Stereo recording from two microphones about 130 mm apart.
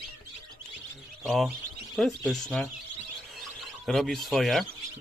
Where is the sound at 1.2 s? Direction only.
Centre (ahead or behind).